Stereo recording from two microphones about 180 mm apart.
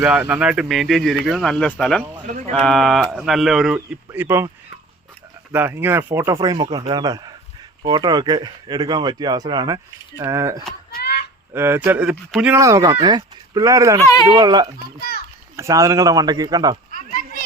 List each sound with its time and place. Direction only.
0.0 s speech: 5° right (ahead or behind)
3.8 s speech: 10° right (ahead or behind)
5.5 s speech: 10° right (ahead or behind)
6.3 s speech: 25° right (ahead or behind)
10.9 s goose: 65° left (ahead or behind)
11.5 s speech: 15° right (ahead or behind)
12.5 s speech: 15° right (ahead or behind)
14.0 s speech: 20° left (ahead or behind)
14.3 s speech: 20° right (ahead or behind)
16.9 s a sound: 50° left (ahead or behind)